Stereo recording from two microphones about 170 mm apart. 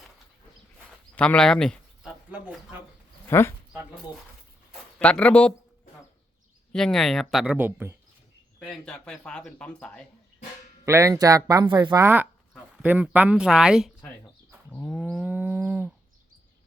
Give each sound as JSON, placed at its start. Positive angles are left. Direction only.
{"t": 1.1, "sound": "speech", "side_deg": 5}
{"t": 2.3, "sound": "speech", "side_deg": -10}
{"t": 3.2, "sound": "speech", "side_deg": 15}
{"t": 4.7, "sound": "speech", "side_deg": 5}
{"t": 6.7, "sound": "speech", "side_deg": 5}
{"t": 8.5, "sound": "speech", "side_deg": 5}
{"t": 10.8, "sound": "speech", "side_deg": -20}
{"t": 12.0, "sound": "speech", "side_deg": -10}
{"t": 14.7, "sound": "livestock", "side_deg": 5}